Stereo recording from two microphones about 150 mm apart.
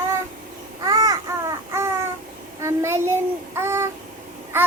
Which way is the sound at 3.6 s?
15° right (ahead or behind).